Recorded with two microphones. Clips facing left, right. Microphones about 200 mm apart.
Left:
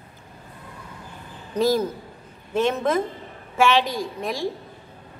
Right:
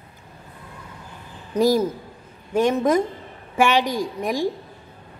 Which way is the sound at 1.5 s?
10° right (ahead or behind).